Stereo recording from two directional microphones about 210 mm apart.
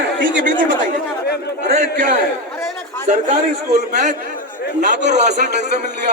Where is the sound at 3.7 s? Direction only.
35° right (ahead or behind).